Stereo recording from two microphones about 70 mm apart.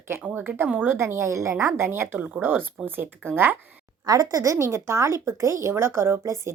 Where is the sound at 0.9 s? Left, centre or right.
Right.